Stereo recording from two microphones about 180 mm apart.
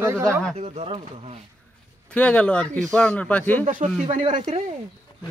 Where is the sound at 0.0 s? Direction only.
15° right (ahead or behind).